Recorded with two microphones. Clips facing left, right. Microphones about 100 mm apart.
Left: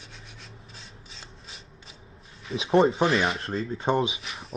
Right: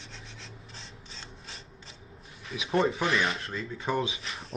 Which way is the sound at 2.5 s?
30° left (ahead or behind).